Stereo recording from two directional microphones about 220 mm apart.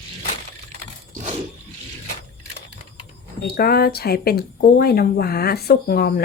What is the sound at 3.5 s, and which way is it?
Speech, 45° left (ahead or behind).